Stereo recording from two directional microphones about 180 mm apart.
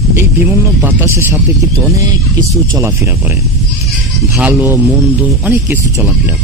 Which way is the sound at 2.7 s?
15° right (ahead or behind).